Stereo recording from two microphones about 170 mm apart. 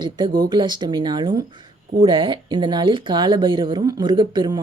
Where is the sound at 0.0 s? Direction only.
25° right (ahead or behind).